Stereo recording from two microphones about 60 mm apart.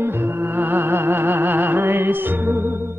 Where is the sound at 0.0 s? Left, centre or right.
Right.